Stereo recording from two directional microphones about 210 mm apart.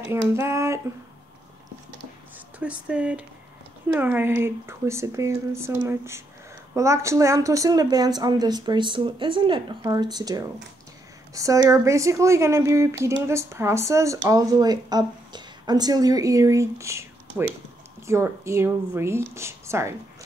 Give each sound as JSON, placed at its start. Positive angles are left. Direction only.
{"t": 0.3, "sound": "a woman's voice", "side_deg": -10}
{"t": 2.3, "sound": "a woman's voice", "side_deg": -5}